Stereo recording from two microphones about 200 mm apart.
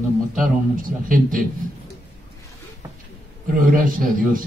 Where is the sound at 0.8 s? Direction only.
45° right (ahead or behind).